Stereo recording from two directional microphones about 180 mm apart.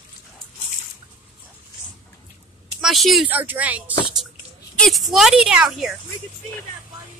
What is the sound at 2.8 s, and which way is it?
A woman's voice, centre (ahead or behind).